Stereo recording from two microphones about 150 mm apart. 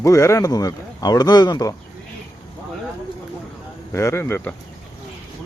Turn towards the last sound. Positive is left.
turn(degrees=15)  # may be behind; listen again after turning